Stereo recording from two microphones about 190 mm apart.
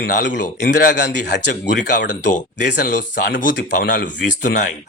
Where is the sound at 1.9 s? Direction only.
40° left (ahead or behind).